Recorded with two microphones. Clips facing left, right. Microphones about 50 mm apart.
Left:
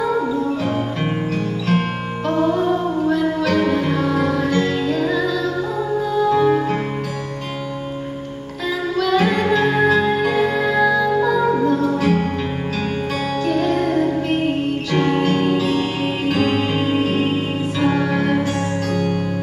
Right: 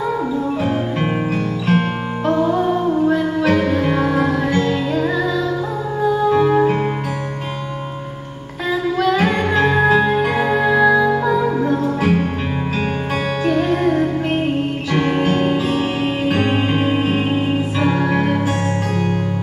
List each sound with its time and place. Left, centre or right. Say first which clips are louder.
0.6 s music: right 2 dB; centre
8.9 s music: left 1 dB; centre
9.8 s music: right 2 dB; centre
13.5 s music: right 2 dB; centre